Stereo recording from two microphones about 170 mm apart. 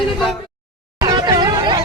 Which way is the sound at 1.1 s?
25° right (ahead or behind).